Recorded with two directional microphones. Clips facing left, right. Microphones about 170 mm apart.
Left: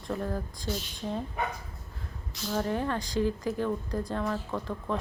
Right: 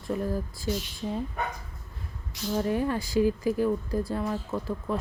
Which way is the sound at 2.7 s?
10° right (ahead or behind).